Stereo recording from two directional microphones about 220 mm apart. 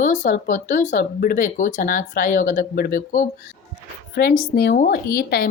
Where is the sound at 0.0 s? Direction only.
35° left (ahead or behind).